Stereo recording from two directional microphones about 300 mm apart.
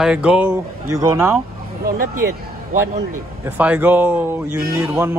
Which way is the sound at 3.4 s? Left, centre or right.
Centre.